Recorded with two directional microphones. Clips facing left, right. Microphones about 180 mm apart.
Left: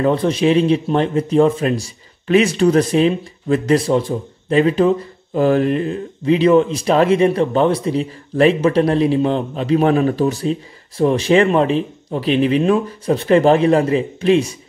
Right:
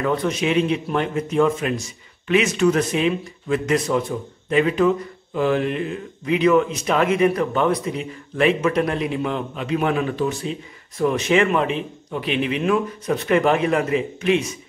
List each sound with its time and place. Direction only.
0.0 s a man's voice: 30° left (ahead or behind)